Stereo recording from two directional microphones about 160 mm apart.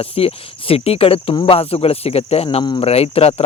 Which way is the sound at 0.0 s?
35° left (ahead or behind).